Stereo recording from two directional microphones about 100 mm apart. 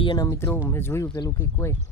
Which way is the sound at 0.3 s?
25° left (ahead or behind).